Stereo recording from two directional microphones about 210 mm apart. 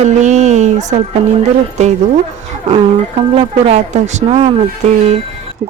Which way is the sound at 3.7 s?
30° right (ahead or behind).